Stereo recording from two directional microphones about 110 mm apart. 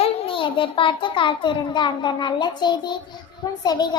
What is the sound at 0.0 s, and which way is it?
A child's voice, 55° left (ahead or behind).